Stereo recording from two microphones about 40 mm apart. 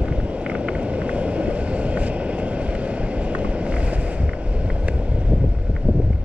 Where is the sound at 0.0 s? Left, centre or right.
Right.